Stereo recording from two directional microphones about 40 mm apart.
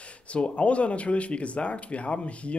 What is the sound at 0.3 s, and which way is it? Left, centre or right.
Speech, left.